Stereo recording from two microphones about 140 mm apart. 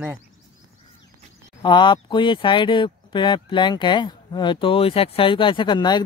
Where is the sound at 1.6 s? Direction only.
35° left (ahead or behind).